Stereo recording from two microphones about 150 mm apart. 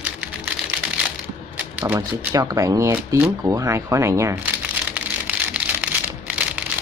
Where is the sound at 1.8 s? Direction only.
15° right (ahead or behind).